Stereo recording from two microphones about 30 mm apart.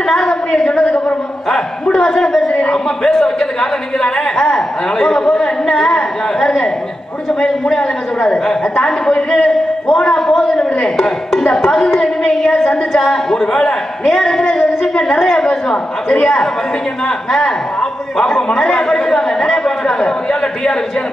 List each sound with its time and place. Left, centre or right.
0.0 s a sound: centre
1.0 s a sound: left
2.1 s a woman's voice: left
4.0 s a woman's voice: left
9.1 s a man's voice: left
10.4 s a woman's voice: left
11.5 s a woman's voice: centre
15.3 s a woman's voice: left
18.8 s a woman's voice: centre